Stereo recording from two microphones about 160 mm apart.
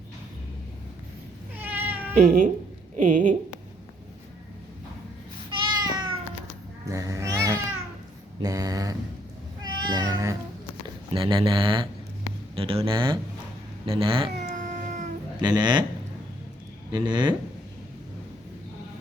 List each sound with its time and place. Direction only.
1.5 s cat: 10° right (ahead or behind)
2.1 s a woman's voice: 55° right (ahead or behind)
5.5 s cat: 30° right (ahead or behind)
8.4 s speech: 25° right (ahead or behind)
9.8 s cat: 25° right (ahead or behind)
11.1 s speech: 30° right (ahead or behind)
14.4 s cat: 50° right (ahead or behind)
15.4 s speech: 25° right (ahead or behind)
16.9 s speech: 30° right (ahead or behind)